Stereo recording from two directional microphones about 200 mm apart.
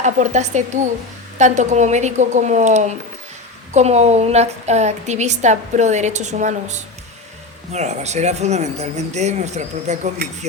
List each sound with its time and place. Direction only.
0.0 s a woman's voice: 35° right (ahead or behind)